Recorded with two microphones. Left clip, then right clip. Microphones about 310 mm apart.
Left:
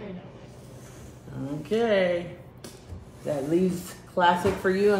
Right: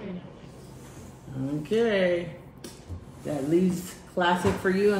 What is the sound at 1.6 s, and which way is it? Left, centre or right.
Speech, centre.